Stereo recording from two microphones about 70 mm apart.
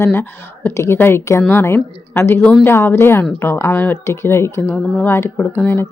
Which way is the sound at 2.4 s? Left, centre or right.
Centre.